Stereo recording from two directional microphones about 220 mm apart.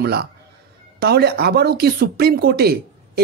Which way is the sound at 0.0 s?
45° right (ahead or behind).